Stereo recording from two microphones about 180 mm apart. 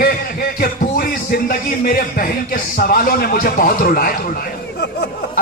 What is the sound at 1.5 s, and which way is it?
Speech, 50° left (ahead or behind).